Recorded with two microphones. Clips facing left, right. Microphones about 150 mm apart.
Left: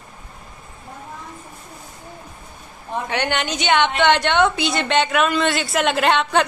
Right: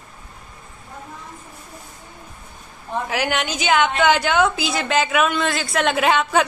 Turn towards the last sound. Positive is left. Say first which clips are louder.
# even
turn(degrees=0)  # may be behind; listen again after turning